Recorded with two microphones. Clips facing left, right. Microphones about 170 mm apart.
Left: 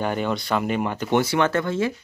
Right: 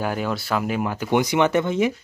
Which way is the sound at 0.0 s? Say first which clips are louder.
Left 1 dB; 5° right (ahead or behind).